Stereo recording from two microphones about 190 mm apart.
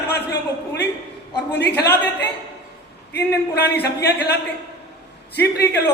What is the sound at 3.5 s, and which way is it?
Speech, 60° left (ahead or behind).